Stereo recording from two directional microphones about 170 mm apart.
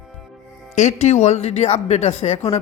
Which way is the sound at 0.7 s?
45° left (ahead or behind).